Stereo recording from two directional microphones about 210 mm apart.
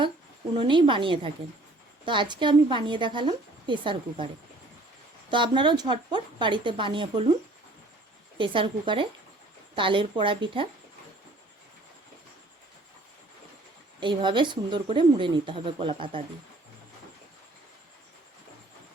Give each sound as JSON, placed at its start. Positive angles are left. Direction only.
{"t": 0.6, "sound": "a woman's voice", "side_deg": -25}
{"t": 5.3, "sound": "a woman's voice", "side_deg": -20}
{"t": 8.4, "sound": "a woman's voice", "side_deg": -25}
{"t": 14.0, "sound": "a woman's voice", "side_deg": -20}